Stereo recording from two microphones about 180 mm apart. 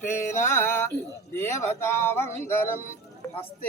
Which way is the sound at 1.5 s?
15° left (ahead or behind).